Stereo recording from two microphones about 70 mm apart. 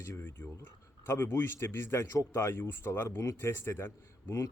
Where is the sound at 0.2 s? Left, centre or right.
Left.